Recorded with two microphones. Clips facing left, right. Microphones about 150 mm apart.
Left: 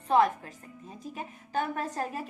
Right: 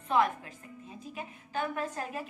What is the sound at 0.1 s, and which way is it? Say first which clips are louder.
A woman's voice: left 4 dB; 35° left (ahead or behind).